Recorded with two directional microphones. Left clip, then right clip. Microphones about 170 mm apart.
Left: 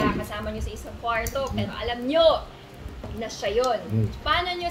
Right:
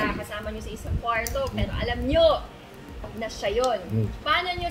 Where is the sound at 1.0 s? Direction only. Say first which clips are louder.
Even; 20° left (ahead or behind).